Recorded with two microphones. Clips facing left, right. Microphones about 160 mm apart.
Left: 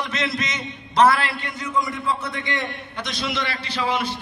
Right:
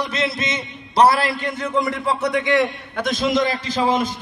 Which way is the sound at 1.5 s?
60° right (ahead or behind).